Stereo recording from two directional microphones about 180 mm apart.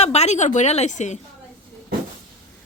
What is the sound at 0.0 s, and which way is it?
A woman's voice, 35° left (ahead or behind).